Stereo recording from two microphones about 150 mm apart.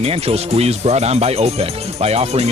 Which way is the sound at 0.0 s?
45° right (ahead or behind).